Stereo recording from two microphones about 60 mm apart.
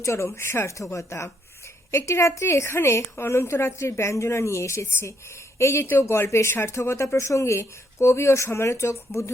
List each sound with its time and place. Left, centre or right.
0.0 s speech: left